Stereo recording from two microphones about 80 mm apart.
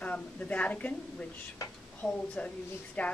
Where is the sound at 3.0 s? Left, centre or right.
Centre.